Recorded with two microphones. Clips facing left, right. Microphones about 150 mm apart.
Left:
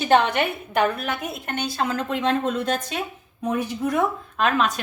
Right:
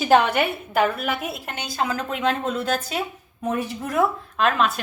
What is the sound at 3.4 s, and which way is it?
Speech, 5° right (ahead or behind).